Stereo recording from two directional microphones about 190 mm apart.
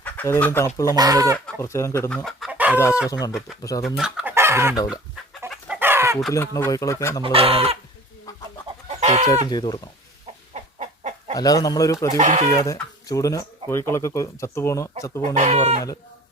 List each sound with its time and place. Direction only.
0.0 s speech: 10° left (ahead or behind)
0.9 s speech: 20° right (ahead or behind)
1.5 s speech: 15° left (ahead or behind); by 2.7 s 10° right (ahead or behind)
2.7 s speech: 15° left (ahead or behind)
3.8 s chicken: centre (ahead or behind)
6.3 s speech: 15° left (ahead or behind)
7.3 s speech: 30° right (ahead or behind)
8.6 s chicken: 35° right (ahead or behind)
9.5 s speech: 25° left (ahead or behind)
10.5 s chicken: 40° right (ahead or behind)
11.3 s speech: 20° left (ahead or behind)
12.1 s speech: 40° right (ahead or behind)
12.6 s speech: 15° left (ahead or behind)
15.4 s speech: 35° right (ahead or behind)